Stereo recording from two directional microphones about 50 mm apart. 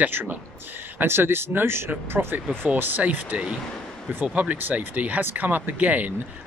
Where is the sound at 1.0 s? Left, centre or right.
Right.